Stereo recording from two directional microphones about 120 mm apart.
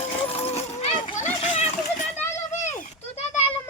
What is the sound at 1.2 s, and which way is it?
Children playing, 65° left (ahead or behind).